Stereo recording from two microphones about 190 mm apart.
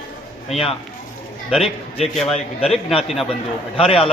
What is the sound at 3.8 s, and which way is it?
Speech, 30° left (ahead or behind).